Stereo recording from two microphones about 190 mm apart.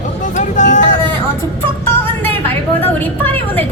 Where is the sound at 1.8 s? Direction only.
10° left (ahead or behind).